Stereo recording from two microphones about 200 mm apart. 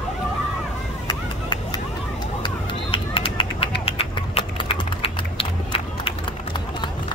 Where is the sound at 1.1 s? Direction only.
20° left (ahead or behind).